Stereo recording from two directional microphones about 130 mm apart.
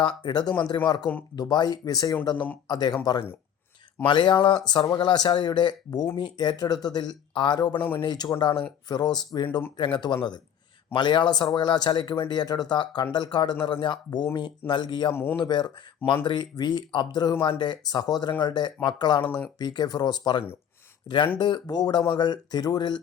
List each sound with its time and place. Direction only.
0.0 s speech: 35° left (ahead or behind)
7.8 s speech: 15° left (ahead or behind)
8.0 s speech: 35° left (ahead or behind)
15.1 s speech: 15° left (ahead or behind)
15.4 s speech: 35° left (ahead or behind)
19.2 s speech: 10° left (ahead or behind)
19.5 s speech: 30° left (ahead or behind)